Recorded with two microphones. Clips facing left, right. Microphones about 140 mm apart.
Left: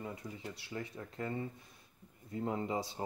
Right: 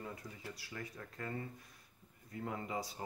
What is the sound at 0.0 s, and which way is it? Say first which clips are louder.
Speech: left 4 dB; 20° left (ahead or behind).